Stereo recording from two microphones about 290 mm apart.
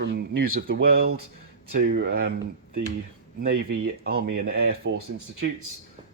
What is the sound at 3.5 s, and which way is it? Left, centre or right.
Speech, right.